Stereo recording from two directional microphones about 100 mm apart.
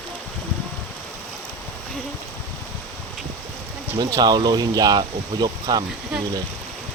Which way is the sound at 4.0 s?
45° right (ahead or behind).